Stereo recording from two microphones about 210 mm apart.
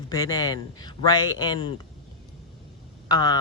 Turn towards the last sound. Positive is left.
turn(degrees=20)  # may be behind; listen again after turning